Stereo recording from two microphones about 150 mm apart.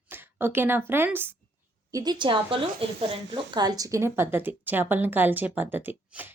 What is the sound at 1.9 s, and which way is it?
A woman's voice, 25° right (ahead or behind).